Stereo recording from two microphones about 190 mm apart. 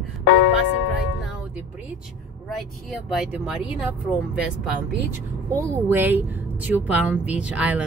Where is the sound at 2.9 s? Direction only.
Centre (ahead or behind).